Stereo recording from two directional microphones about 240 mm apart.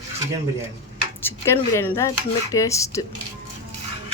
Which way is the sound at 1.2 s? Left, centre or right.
Centre.